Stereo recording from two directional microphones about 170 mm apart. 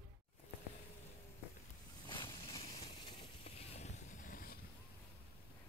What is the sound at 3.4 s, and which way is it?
Boat, 40° left (ahead or behind).